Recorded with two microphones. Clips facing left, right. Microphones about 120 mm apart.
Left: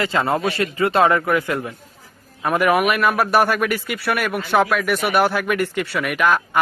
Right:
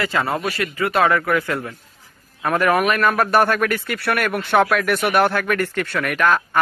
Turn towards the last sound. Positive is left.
turn(degrees=10)  # may be behind; listen again after turning